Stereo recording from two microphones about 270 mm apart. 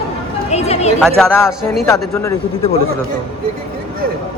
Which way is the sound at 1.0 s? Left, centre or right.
Centre.